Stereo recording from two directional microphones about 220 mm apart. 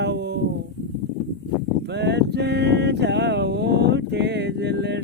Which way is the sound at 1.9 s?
50° right (ahead or behind).